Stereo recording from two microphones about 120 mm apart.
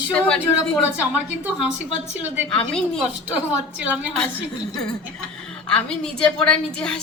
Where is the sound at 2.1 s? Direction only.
15° right (ahead or behind).